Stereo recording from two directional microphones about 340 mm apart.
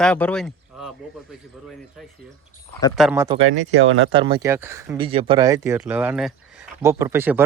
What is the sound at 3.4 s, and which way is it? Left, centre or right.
Speech, right.